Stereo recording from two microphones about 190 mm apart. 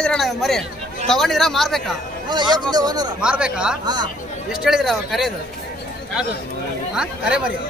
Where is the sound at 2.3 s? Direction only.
25° right (ahead or behind).